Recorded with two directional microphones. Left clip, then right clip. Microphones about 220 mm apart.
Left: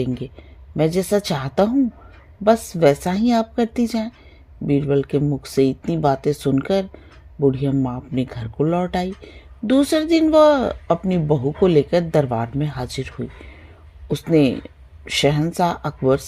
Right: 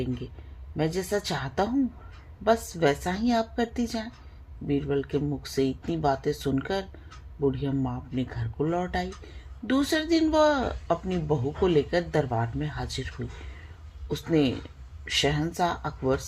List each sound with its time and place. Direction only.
0.8 s a woman's voice: 45° left (ahead or behind)